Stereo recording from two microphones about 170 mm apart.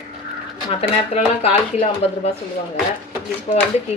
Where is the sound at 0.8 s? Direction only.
35° left (ahead or behind).